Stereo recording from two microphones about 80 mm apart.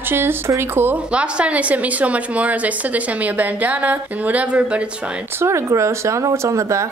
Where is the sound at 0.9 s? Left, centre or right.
Centre.